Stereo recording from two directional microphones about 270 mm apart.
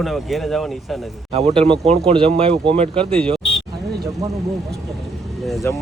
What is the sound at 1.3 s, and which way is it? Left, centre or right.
Speech, right.